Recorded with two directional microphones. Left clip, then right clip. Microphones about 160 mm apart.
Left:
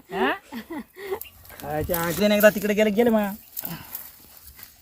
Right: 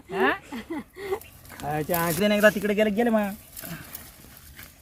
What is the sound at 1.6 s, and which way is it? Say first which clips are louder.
Speech: even; 80° right.